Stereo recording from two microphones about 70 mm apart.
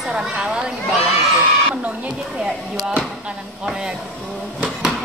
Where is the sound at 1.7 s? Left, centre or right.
Right.